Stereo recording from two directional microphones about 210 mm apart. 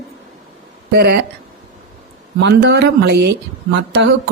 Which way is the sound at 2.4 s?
55° right (ahead or behind).